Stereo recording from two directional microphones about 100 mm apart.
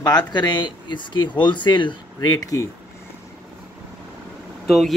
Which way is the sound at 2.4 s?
35° left (ahead or behind).